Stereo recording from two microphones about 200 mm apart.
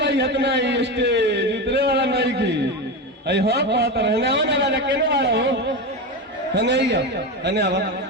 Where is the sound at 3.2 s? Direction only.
55° right (ahead or behind).